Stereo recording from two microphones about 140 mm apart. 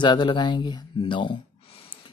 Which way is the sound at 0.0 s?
35° left (ahead or behind).